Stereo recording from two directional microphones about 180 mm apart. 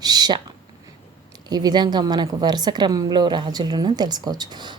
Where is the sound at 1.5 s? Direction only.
20° right (ahead or behind).